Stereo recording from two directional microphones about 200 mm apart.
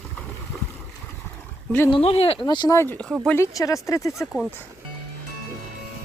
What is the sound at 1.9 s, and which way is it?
Speech, 30° left (ahead or behind).